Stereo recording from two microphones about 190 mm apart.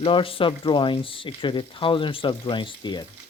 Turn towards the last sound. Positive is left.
turn(degrees=25)  # may be behind; listen again after turning